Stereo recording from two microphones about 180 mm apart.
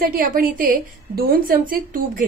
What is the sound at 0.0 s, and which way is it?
A woman's voice, 50° right (ahead or behind).